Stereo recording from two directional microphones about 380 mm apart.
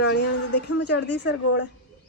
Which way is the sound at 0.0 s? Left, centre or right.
Left.